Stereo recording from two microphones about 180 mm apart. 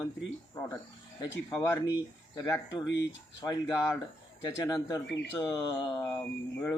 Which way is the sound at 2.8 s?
75° left (ahead or behind).